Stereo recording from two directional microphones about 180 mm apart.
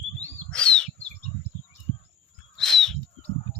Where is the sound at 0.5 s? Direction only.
5° left (ahead or behind).